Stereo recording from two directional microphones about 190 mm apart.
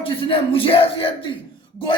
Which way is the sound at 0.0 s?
30° left (ahead or behind).